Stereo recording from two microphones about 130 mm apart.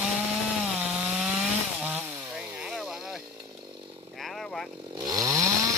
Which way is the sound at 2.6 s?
Centre (ahead or behind).